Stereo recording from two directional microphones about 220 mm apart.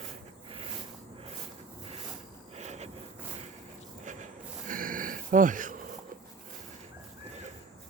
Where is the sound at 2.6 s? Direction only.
30° right (ahead or behind).